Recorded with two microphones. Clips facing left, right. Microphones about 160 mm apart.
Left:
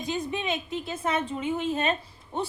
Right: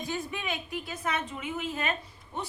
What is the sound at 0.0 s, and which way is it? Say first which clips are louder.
A woman's voice: left 4 dB; 20° left (ahead or behind).